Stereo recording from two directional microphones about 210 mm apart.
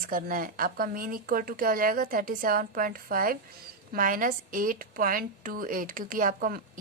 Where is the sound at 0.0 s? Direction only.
40° right (ahead or behind).